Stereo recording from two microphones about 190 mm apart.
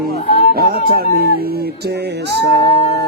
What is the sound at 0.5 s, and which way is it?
Speech, 55° right (ahead or behind).